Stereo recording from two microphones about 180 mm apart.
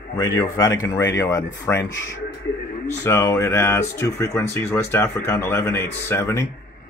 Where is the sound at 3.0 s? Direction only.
15° left (ahead or behind).